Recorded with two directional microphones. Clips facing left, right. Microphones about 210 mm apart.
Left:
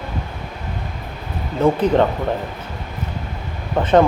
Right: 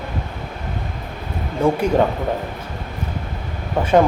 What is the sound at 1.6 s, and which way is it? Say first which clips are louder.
Speech: left 1 dB; 10° right (ahead or behind).